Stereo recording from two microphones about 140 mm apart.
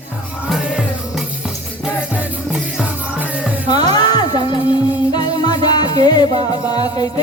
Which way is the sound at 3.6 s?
30° left (ahead or behind).